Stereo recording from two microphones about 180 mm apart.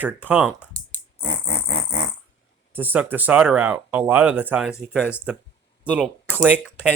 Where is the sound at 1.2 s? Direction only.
30° left (ahead or behind).